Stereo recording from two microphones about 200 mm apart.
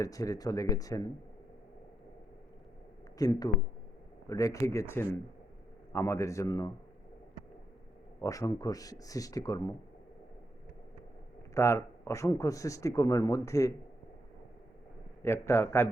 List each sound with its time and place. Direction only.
0.0 s speech: 15° left (ahead or behind)
3.2 s speech: 20° left (ahead or behind)
8.2 s speech: 15° left (ahead or behind)
11.5 s speech: 15° left (ahead or behind)
15.2 s speech: 10° left (ahead or behind)